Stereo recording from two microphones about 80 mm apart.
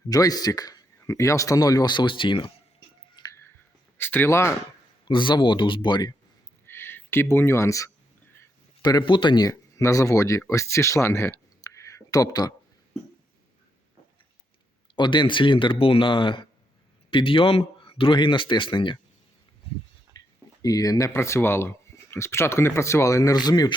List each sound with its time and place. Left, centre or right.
0.1 s speech: left
3.2 s music: left
3.9 s speech: left
5.0 s speech: left
6.7 s speech: left
8.8 s a man's voice: left
9.0 s speech: left
9.5 s speech: left
11.6 s a sound: left
14.9 s speech: left
20.6 s speech: left
23.3 s speech: left